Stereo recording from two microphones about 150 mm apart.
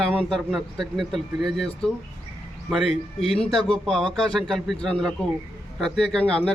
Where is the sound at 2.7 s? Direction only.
Centre (ahead or behind).